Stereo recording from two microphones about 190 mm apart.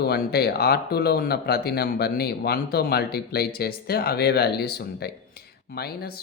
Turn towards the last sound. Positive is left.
turn(degrees=55)  # may be behind; listen again after turning